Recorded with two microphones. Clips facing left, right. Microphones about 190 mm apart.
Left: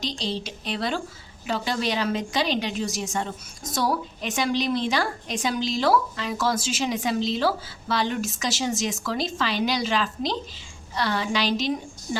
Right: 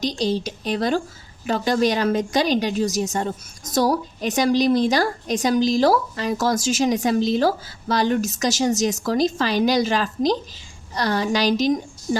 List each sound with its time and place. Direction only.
0.0 s a woman's voice: 45° right (ahead or behind)